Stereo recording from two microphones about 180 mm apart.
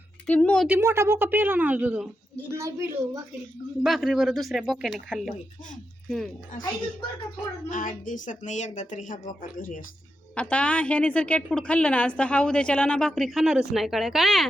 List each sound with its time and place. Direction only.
0.3 s a woman's voice: 5° left (ahead or behind)
0.7 s a woman's voice: 15° right (ahead or behind)
3.8 s a woman's voice: centre (ahead or behind)
7.7 s speech: 45° left (ahead or behind)
10.3 s a woman's voice: 5° left (ahead or behind)